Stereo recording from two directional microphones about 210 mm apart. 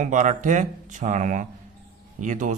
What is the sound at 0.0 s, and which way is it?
A man's voice, 35° right (ahead or behind).